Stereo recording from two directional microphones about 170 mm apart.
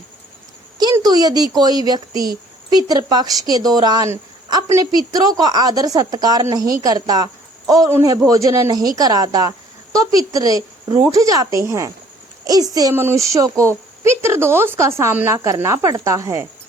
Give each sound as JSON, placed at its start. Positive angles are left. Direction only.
{"t": 0.8, "sound": "a woman's voice", "side_deg": -25}